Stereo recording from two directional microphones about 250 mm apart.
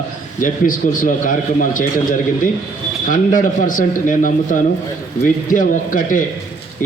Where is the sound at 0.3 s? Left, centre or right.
Left.